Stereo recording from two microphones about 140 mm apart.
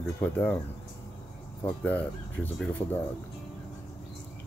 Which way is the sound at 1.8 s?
10° left (ahead or behind).